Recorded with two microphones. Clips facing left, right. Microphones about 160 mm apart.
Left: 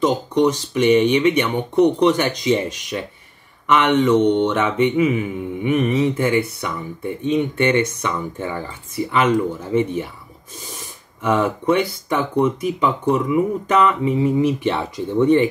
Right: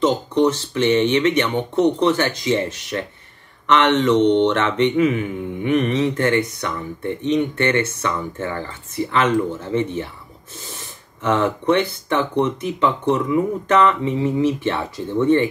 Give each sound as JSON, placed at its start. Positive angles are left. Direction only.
{"t": 0.0, "sound": "speech", "side_deg": 15}
{"t": 11.2, "sound": "speech", "side_deg": 10}